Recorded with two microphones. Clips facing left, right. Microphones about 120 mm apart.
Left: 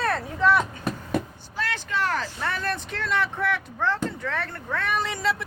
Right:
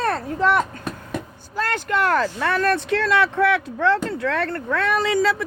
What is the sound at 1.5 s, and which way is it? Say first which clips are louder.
Speech: right 6 dB; 45° right (ahead or behind).